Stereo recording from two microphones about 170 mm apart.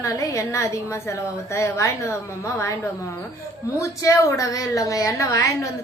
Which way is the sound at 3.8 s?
20° left (ahead or behind).